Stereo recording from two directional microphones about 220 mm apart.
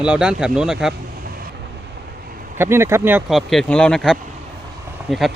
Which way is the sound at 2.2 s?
40° right (ahead or behind).